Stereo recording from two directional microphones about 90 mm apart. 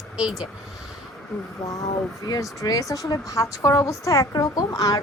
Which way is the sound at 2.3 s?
45° left (ahead or behind).